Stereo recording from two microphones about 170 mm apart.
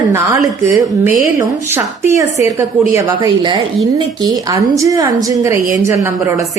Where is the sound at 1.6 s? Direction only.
15° right (ahead or behind).